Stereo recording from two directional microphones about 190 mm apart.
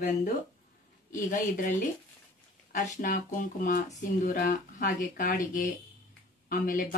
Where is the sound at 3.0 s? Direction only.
45° left (ahead or behind).